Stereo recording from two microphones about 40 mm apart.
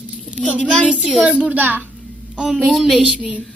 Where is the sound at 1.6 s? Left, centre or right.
Right.